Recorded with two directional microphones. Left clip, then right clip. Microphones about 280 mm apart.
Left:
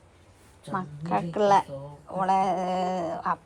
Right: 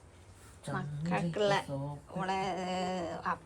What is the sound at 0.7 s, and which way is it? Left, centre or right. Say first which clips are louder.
A woman's voice: left 8 dB; centre.